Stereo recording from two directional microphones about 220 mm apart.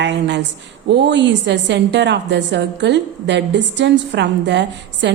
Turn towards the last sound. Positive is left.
turn(degrees=-50)  # may be behind; listen again after turning